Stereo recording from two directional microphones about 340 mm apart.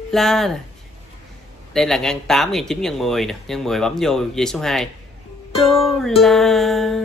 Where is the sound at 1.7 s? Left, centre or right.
Centre.